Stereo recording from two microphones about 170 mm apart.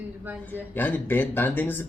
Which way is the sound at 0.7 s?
10° left (ahead or behind).